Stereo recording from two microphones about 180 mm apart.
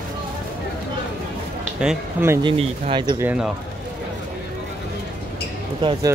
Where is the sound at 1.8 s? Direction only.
10° right (ahead or behind).